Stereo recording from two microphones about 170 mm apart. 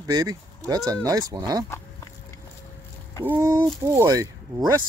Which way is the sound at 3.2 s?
15° right (ahead or behind).